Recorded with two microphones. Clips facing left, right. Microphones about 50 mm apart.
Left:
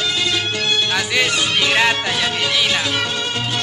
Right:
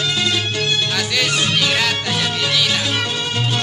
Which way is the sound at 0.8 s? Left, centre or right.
Centre.